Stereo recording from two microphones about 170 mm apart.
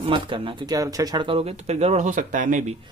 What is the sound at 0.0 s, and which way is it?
Speech, 30° right (ahead or behind).